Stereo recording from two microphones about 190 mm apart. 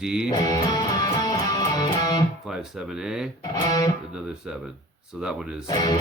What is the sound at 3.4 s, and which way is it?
Music, 20° left (ahead or behind).